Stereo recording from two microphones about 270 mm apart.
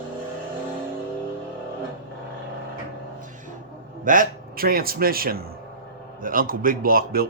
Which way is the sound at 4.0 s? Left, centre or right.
Right.